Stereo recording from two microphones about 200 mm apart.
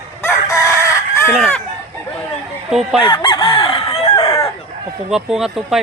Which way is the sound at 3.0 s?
25° left (ahead or behind).